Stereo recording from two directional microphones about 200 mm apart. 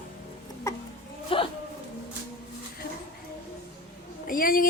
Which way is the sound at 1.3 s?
25° left (ahead or behind).